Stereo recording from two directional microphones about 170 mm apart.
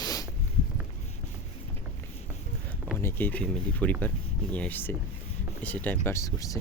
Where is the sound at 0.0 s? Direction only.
20° left (ahead or behind).